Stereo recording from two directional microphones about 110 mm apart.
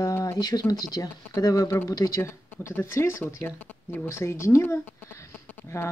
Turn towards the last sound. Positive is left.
turn(degrees=25)  # may be behind; listen again after turning